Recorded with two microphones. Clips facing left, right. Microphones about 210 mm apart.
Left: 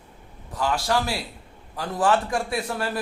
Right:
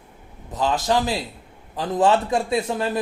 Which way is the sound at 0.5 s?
20° right (ahead or behind).